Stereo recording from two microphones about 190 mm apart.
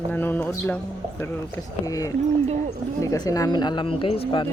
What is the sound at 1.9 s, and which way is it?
Speech, 20° left (ahead or behind).